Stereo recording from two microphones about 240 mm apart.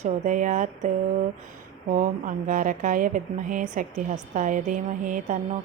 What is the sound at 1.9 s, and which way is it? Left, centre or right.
Speech, right.